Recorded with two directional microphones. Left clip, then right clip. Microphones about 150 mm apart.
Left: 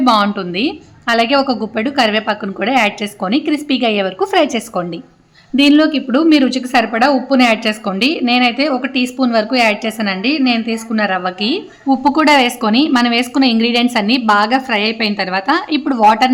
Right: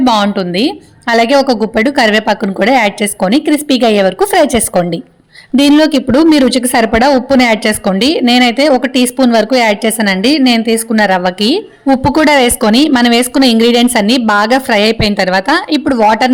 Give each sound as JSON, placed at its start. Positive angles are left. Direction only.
{"t": 0.0, "sound": "a woman's voice", "side_deg": -35}